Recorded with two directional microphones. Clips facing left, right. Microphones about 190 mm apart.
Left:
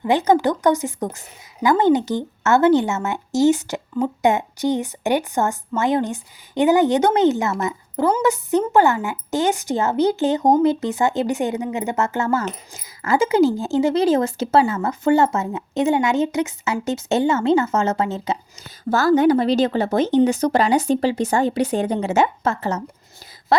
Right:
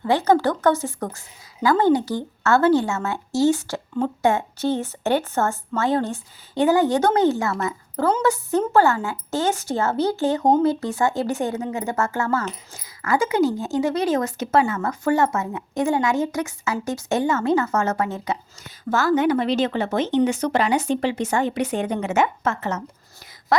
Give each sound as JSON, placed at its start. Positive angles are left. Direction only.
{"t": 0.0, "sound": "a woman's voice", "side_deg": 15}